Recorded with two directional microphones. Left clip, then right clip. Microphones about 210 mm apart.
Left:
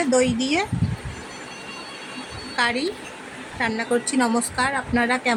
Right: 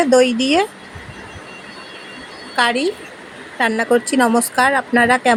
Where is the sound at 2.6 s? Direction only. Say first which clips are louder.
Right 6 dB; 15° right (ahead or behind).